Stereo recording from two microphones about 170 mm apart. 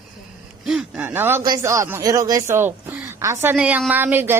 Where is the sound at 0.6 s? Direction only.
Centre (ahead or behind).